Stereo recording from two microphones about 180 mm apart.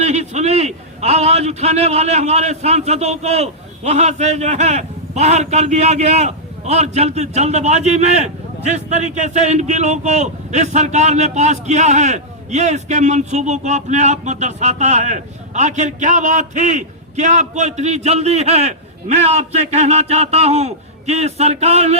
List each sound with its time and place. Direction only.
0.0 s a man's voice: 40° right (ahead or behind)